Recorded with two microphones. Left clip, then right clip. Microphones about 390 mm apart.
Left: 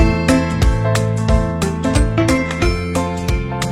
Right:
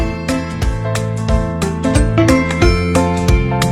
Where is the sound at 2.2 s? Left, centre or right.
Right.